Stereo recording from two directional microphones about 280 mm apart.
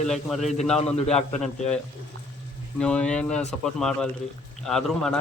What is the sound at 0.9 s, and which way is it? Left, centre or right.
Speech, left.